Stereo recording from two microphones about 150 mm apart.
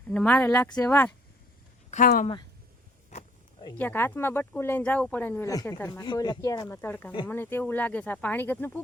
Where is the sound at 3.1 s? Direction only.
50° left (ahead or behind).